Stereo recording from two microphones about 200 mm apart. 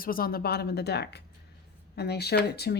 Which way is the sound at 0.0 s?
45° left (ahead or behind).